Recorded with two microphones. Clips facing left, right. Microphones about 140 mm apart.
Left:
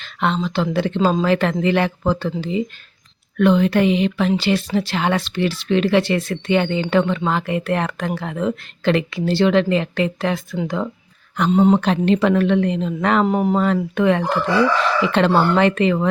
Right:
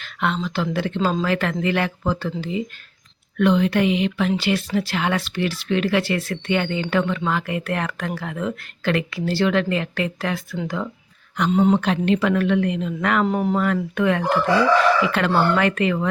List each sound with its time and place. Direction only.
0.0 s a sound: 30° left (ahead or behind)
0.4 s speech: 25° left (ahead or behind)
3.3 s a woman's voice: 45° left (ahead or behind); by 16.0 s 25° left (ahead or behind)